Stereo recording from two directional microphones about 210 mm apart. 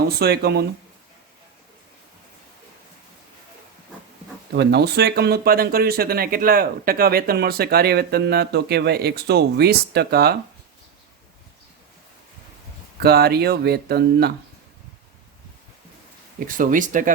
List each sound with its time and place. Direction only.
0.2 s speech: 50° right (ahead or behind)
4.5 s speech: 50° right (ahead or behind)
13.0 s speech: 50° right (ahead or behind)
16.6 s speech: 40° right (ahead or behind)